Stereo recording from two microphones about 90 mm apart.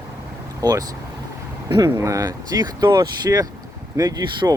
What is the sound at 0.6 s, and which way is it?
Speech, 45° right (ahead or behind).